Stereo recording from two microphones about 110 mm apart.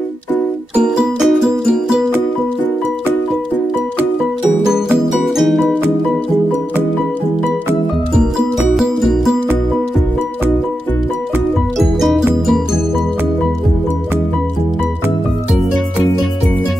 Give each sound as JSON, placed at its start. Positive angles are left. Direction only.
{"t": 0.8, "sound": "music", "side_deg": -5}
{"t": 4.6, "sound": "music", "side_deg": -5}
{"t": 8.4, "sound": "music", "side_deg": 0}
{"t": 11.8, "sound": "music", "side_deg": 0}